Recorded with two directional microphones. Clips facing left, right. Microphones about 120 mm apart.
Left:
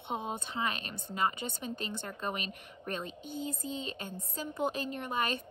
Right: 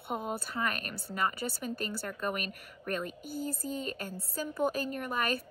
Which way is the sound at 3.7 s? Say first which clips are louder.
Right 2 dB; 50° right (ahead or behind).